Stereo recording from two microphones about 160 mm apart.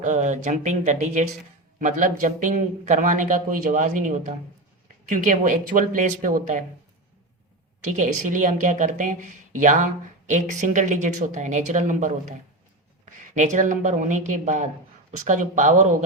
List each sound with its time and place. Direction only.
0.0 s a woman's voice: 50° right (ahead or behind)
7.9 s a woman's voice: 55° right (ahead or behind)
13.3 s a woman's voice: 50° right (ahead or behind)